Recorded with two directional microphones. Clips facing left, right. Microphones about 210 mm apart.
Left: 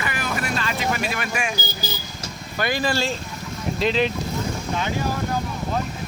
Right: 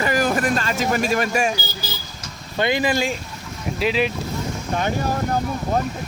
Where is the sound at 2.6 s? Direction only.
20° right (ahead or behind).